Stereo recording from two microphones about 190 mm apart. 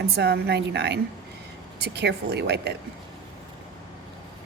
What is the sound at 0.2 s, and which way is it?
A woman's voice, 60° right (ahead or behind).